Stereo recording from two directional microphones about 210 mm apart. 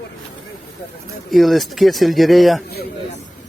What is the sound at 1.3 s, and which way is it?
Speech, centre (ahead or behind).